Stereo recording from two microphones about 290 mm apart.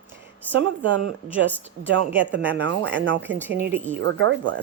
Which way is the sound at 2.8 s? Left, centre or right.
Right.